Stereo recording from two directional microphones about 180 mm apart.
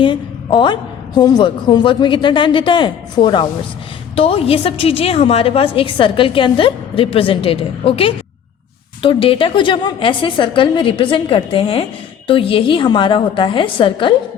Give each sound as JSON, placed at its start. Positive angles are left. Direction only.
{"t": 0.0, "sound": "a woman's voice", "side_deg": 25}